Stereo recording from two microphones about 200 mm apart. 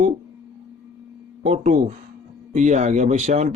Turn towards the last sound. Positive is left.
turn(degrees=-35)  # may be behind; listen again after turning